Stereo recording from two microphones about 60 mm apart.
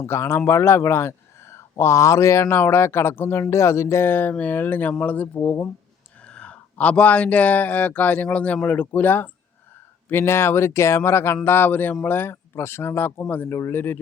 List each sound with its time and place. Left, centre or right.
0.0 s speech: left
2.6 s speech: left
3.5 s speech: left
6.2 s a man's voice: centre
10.1 s speech: left